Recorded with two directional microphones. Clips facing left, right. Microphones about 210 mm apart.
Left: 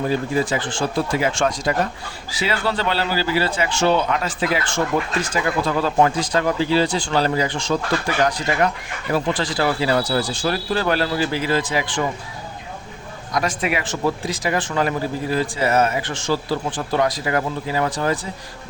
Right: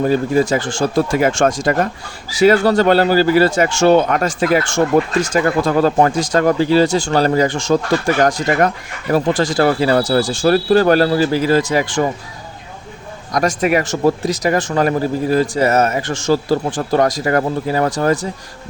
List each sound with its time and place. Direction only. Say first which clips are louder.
0.3 s speech: right 6 dB; 45° right (ahead or behind)
13.3 s speech: right 7 dB; 45° right (ahead or behind)